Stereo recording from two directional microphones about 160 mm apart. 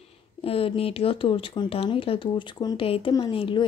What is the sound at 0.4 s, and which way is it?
Speech, 35° left (ahead or behind).